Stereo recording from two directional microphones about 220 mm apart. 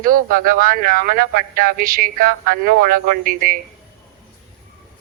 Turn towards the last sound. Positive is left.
turn(degrees=-40)  # may be behind; listen again after turning